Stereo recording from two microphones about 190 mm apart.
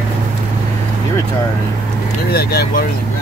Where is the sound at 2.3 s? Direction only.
55° left (ahead or behind).